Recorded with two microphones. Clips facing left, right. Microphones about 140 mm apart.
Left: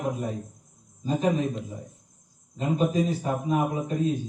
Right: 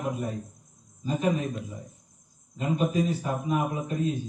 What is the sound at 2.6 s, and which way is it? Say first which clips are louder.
A man's voice: left 2 dB; 35° left (ahead or behind).